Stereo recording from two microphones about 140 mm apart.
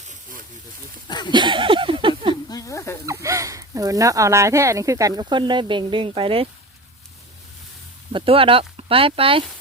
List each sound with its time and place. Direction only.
1.0 s speech: 30° left (ahead or behind)
1.3 s speech: 35° right (ahead or behind)
2.3 s speech: 25° left (ahead or behind)
3.1 s speech: 20° right (ahead or behind); by 6.5 s 40° right (ahead or behind)
8.1 s speech: 40° right (ahead or behind)